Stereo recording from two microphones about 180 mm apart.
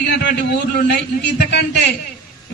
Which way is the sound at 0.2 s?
65° left (ahead or behind).